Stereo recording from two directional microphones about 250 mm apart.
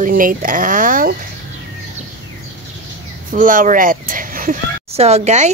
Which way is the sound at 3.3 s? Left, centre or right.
Right.